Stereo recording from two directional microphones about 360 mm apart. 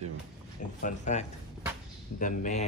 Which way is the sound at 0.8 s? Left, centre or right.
Centre.